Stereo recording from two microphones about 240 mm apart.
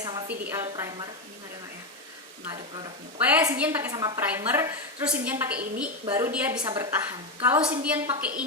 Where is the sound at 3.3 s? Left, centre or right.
Centre.